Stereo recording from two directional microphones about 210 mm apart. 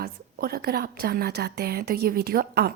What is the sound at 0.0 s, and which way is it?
A woman's voice, 45° right (ahead or behind).